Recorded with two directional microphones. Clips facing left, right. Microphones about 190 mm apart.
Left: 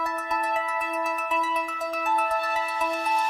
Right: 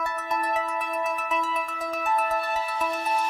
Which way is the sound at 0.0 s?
Centre (ahead or behind).